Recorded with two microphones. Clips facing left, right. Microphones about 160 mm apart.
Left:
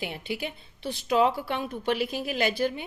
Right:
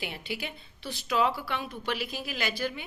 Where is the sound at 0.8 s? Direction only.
50° left (ahead or behind).